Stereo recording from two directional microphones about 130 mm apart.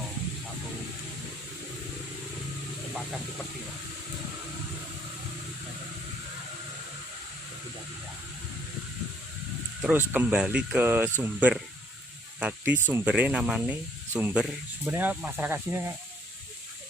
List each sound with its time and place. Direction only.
9.8 s speech: 15° right (ahead or behind)